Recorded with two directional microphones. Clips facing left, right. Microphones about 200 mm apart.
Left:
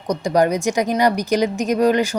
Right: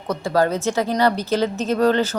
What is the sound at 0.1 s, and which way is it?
A woman's voice, 15° left (ahead or behind).